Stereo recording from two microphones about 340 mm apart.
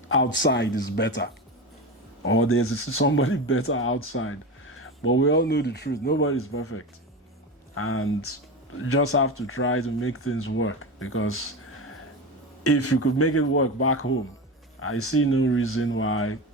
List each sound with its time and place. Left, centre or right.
0.1 s speech: left